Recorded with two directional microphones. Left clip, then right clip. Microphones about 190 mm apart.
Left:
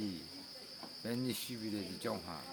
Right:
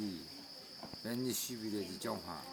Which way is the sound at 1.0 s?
45° left (ahead or behind).